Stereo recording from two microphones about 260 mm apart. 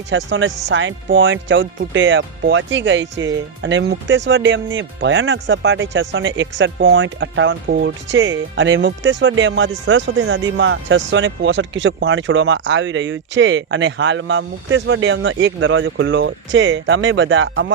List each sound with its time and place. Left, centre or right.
0.1 s speech: right